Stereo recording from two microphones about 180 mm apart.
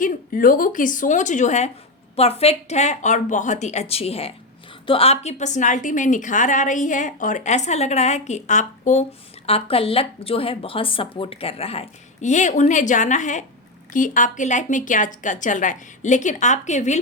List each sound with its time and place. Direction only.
0.0 s a woman's voice: 50° left (ahead or behind)
9.5 s a woman's voice: 30° left (ahead or behind)